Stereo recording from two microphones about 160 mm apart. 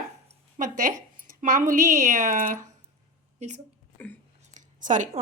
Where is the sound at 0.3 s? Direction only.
50° right (ahead or behind).